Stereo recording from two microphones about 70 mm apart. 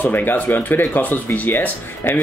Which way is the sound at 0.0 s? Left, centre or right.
Left.